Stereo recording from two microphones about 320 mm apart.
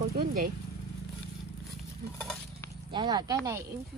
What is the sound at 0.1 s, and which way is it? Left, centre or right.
Vehicle, right.